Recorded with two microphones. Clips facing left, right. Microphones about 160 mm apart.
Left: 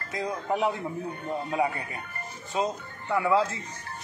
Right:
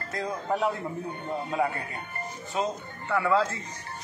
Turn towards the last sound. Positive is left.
turn(degrees=15)  # may be behind; listen again after turning